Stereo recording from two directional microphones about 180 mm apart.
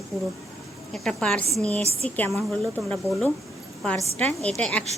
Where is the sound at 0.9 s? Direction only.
5° left (ahead or behind).